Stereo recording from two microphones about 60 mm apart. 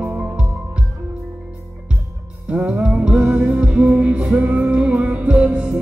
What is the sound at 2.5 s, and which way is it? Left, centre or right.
Music, right.